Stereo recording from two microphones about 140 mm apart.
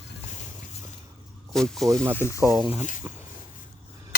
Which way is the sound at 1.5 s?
5° left (ahead or behind).